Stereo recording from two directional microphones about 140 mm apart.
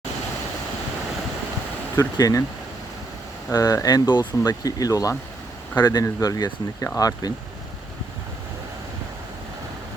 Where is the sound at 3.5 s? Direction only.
25° left (ahead or behind).